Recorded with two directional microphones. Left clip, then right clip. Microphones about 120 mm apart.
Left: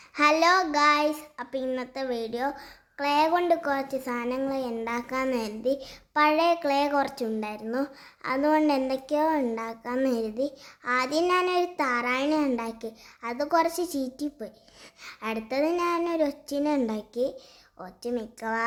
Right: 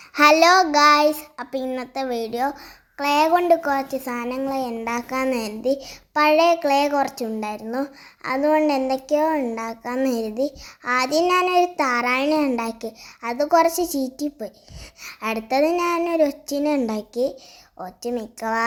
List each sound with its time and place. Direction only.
0.1 s a child's voice: 35° right (ahead or behind); by 9.6 s 10° right (ahead or behind)
9.6 s a child's voice: 25° right (ahead or behind)